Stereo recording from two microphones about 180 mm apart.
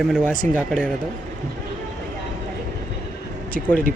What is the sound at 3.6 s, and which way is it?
Speech, 55° right (ahead or behind).